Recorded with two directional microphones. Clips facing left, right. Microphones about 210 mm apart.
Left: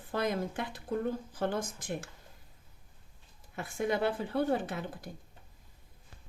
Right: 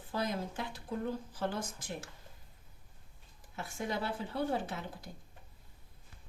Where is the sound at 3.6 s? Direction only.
55° left (ahead or behind).